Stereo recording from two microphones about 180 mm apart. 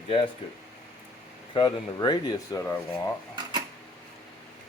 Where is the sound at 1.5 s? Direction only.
25° left (ahead or behind).